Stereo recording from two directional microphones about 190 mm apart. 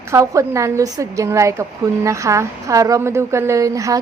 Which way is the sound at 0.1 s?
15° right (ahead or behind).